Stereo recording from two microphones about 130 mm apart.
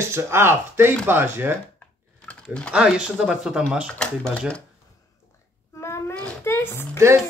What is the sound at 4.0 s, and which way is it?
Speech, 5° left (ahead or behind).